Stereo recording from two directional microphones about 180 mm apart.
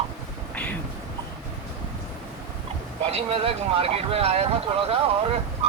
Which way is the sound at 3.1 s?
35° right (ahead or behind).